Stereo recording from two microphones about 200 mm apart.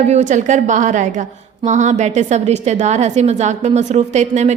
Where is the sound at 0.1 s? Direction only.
35° right (ahead or behind).